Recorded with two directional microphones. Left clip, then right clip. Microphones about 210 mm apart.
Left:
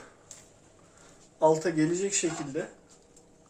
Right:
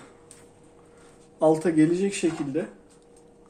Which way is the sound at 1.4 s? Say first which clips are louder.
Right 4 dB; 35° right (ahead or behind).